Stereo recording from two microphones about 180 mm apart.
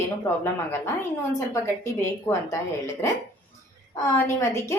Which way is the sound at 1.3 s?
15° left (ahead or behind).